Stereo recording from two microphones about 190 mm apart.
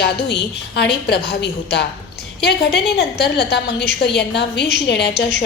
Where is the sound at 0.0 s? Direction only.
60° left (ahead or behind).